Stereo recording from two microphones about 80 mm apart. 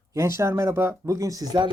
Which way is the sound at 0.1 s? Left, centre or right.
Right.